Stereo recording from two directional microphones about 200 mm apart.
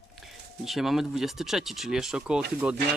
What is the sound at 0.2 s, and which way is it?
Speech, centre (ahead or behind).